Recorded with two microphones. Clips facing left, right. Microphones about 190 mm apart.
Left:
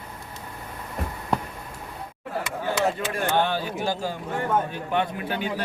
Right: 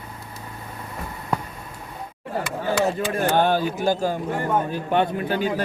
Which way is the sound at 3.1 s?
45° right (ahead or behind).